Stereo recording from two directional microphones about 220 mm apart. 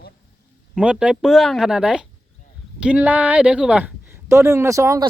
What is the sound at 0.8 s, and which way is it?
Speech, 5° right (ahead or behind).